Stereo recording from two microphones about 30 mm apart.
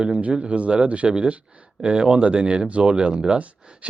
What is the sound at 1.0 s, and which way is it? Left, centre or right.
Speech, right.